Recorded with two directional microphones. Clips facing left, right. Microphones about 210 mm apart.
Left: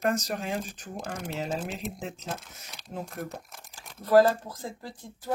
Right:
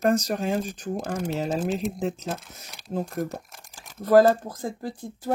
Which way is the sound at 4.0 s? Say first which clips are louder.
Right 3 dB; 50° right (ahead or behind).